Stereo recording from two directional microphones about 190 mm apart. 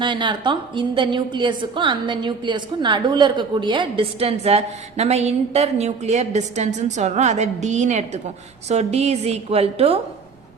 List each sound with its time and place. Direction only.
0.0 s a woman's voice: 25° right (ahead or behind)